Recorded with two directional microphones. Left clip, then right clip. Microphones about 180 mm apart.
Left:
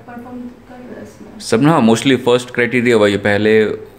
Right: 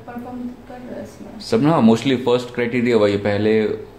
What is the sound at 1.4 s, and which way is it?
Speech, 35° left (ahead or behind).